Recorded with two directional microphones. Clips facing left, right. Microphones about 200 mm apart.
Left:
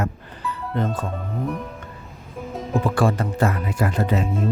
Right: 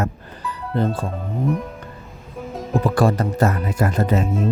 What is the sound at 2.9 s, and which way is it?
Speech, 40° right (ahead or behind).